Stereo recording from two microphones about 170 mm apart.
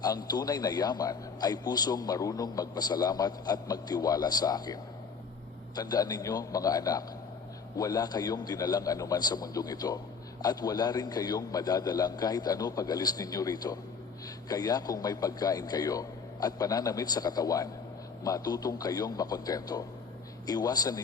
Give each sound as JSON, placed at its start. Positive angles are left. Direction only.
{"t": 0.0, "sound": "a man's voice", "side_deg": 25}